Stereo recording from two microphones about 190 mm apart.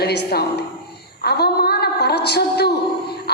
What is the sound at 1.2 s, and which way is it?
A woman's voice, 60° left (ahead or behind).